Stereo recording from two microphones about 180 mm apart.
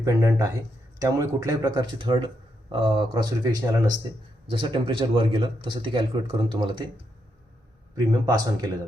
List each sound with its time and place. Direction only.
0.0 s speech: 15° right (ahead or behind)
7.9 s speech: 20° right (ahead or behind)